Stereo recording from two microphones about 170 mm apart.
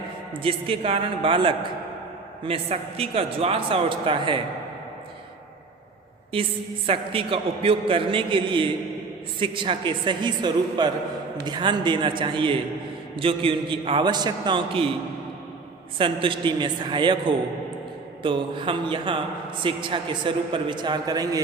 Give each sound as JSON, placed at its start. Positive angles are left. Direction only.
{"t": 0.4, "sound": "a man's voice", "side_deg": -35}
{"t": 6.3, "sound": "a man's voice", "side_deg": -30}
{"t": 16.0, "sound": "a man's voice", "side_deg": -30}